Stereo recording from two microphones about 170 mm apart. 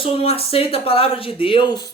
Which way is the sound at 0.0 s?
35° left (ahead or behind).